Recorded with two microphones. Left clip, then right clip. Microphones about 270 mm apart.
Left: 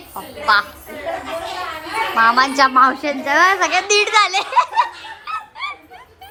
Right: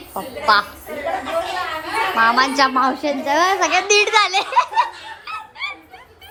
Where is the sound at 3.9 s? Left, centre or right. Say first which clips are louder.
Left 1 dB; centre.